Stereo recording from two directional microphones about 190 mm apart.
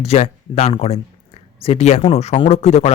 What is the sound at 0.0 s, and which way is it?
Speech, 30° left (ahead or behind).